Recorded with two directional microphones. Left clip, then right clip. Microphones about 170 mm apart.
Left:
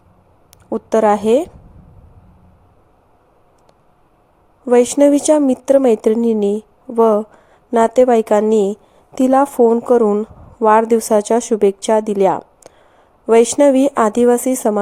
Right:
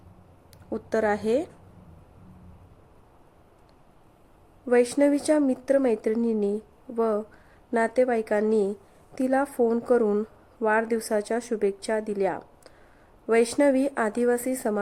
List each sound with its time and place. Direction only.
0.7 s a woman's voice: 30° left (ahead or behind)
4.7 s a woman's voice: 35° left (ahead or behind)